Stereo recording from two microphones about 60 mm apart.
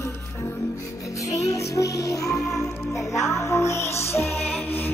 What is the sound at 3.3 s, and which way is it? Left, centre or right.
Music, left.